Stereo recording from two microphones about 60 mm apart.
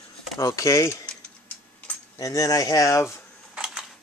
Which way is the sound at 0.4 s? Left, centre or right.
Left.